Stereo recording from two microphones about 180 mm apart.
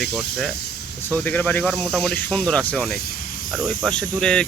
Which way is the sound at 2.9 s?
55° left (ahead or behind).